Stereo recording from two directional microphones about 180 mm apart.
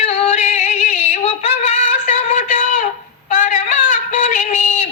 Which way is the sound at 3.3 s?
45° left (ahead or behind).